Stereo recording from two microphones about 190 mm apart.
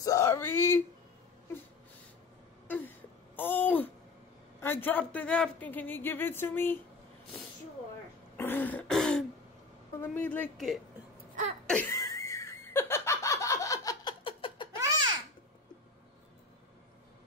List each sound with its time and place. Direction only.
0.0 s a sound: 15° left (ahead or behind)
3.3 s a sound: 10° left (ahead or behind)
4.6 s speech: 10° left (ahead or behind)
8.4 s throat clearing: 10° left (ahead or behind)
10.0 s speech: 10° left (ahead or behind)
11.6 s laughter: 10° left (ahead or behind); by 14.8 s 25° left (ahead or behind)